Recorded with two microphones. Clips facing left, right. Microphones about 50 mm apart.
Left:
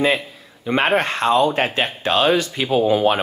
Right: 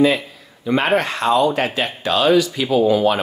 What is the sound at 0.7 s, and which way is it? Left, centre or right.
Speech, left.